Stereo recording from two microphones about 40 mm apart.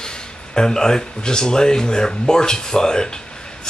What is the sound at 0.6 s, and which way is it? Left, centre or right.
Speech, centre.